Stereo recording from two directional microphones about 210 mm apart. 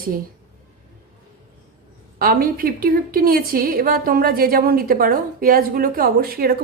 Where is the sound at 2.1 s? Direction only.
45° right (ahead or behind).